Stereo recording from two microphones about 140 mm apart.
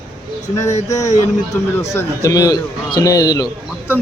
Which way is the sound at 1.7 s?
20° left (ahead or behind).